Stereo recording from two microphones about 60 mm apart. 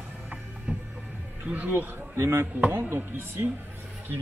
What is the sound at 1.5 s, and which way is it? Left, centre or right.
Speech, right.